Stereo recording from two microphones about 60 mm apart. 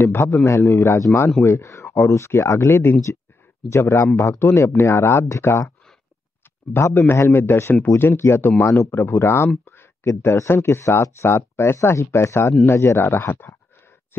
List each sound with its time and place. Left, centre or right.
0.0 s speech: left
1.1 s speech: centre
1.4 s speech: left
6.7 s speech: left